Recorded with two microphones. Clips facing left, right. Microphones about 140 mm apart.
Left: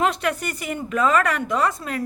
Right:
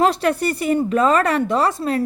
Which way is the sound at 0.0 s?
35° right (ahead or behind).